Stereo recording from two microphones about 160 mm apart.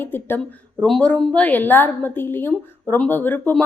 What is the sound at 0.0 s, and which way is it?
A woman's voice, 15° left (ahead or behind).